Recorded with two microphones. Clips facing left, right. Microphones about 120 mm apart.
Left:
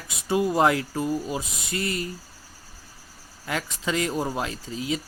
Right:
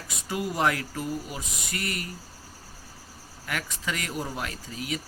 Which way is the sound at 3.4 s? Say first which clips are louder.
Left 4 dB; 25° left (ahead or behind).